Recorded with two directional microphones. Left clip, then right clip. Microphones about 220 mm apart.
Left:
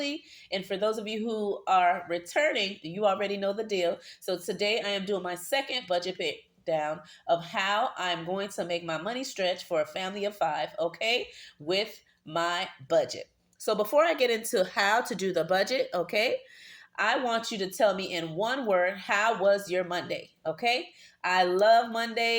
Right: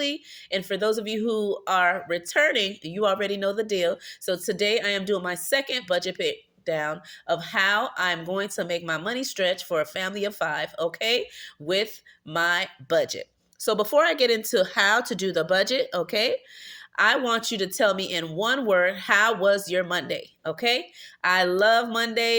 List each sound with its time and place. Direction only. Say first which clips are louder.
0.1 s speech: right 5 dB; 40° right (ahead or behind)